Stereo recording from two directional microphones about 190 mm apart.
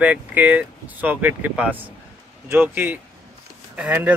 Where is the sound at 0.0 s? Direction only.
10° right (ahead or behind).